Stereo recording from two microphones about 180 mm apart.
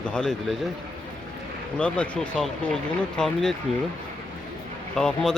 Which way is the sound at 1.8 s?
5° left (ahead or behind).